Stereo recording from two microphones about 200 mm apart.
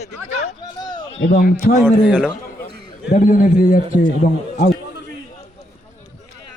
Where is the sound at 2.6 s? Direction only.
45° left (ahead or behind).